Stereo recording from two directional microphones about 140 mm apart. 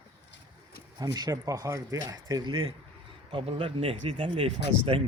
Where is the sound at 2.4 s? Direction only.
35° right (ahead or behind).